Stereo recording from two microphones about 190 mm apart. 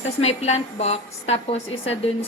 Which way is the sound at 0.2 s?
35° left (ahead or behind).